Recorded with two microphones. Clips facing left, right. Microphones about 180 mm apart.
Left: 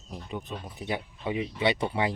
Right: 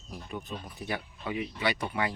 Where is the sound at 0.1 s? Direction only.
20° left (ahead or behind).